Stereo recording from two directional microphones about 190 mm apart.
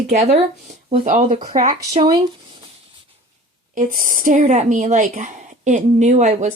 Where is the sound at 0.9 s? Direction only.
40° right (ahead or behind).